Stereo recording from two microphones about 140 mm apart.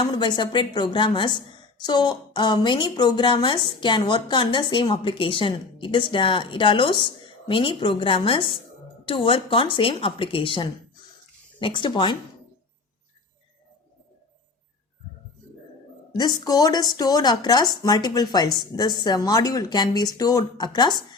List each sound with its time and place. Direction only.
0.0 s a woman's voice: 35° left (ahead or behind)
16.1 s speech: 30° left (ahead or behind)